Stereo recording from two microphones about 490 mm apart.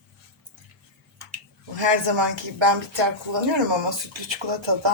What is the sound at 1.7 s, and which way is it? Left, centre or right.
Speech, right.